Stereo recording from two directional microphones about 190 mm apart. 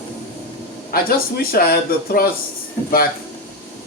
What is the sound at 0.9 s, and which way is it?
A man's voice, 50° left (ahead or behind).